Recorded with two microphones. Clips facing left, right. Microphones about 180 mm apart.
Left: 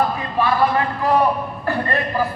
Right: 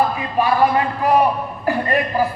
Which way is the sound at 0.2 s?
15° right (ahead or behind).